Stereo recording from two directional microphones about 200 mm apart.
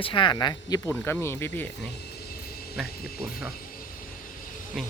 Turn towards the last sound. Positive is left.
turn(degrees=0)  # may be behind; listen again after turning